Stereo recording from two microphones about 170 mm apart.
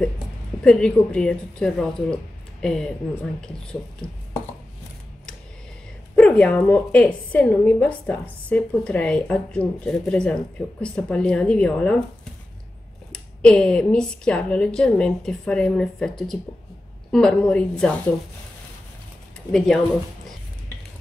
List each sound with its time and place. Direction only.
0.7 s a woman's voice: 5° left (ahead or behind)
6.1 s a woman's voice: 5° left (ahead or behind)
13.1 s a woman's voice: 5° left (ahead or behind)
19.5 s a woman's voice: 5° left (ahead or behind)